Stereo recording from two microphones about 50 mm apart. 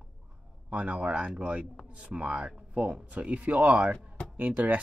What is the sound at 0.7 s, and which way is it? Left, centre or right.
Speech, right.